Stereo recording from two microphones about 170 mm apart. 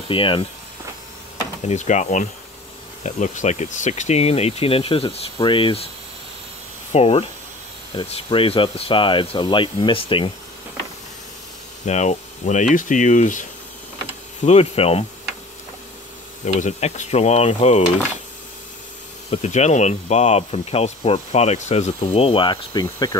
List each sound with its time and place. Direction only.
0.1 s speech: 30° left (ahead or behind)
1.6 s speech: 40° left (ahead or behind)
6.9 s speech: 35° left (ahead or behind)
11.8 s speech: 40° left (ahead or behind)
14.4 s speech: 40° left (ahead or behind)
16.5 s speech: 45° left (ahead or behind)
19.3 s speech: 40° left (ahead or behind); by 23.1 s 25° left (ahead or behind)